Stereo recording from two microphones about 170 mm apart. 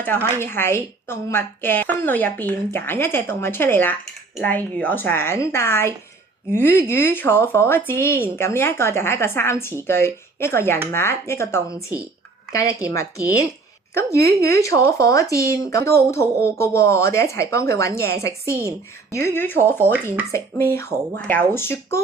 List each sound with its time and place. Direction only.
0.0 s a woman's voice: 10° left (ahead or behind)
19.8 s speech: 10° right (ahead or behind)
20.3 s a woman's voice: 15° left (ahead or behind)